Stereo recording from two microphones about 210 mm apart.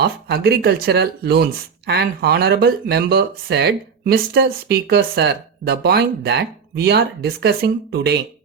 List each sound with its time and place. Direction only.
0.0 s speech: 50° right (ahead or behind)